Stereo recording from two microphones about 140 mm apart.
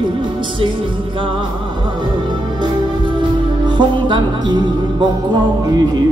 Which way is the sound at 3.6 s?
35° right (ahead or behind).